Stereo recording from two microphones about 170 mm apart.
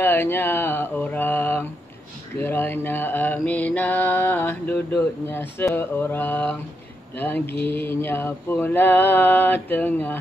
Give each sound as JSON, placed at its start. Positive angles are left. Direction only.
{"t": 0.0, "sound": "mantra", "side_deg": 15}